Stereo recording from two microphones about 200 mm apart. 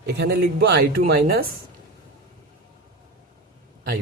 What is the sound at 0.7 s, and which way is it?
Speech, 50° right (ahead or behind).